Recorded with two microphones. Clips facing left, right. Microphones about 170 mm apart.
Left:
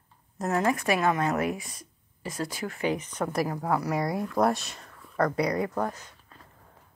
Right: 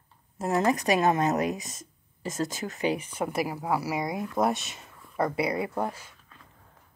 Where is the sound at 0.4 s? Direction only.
30° right (ahead or behind); by 6.1 s 10° right (ahead or behind).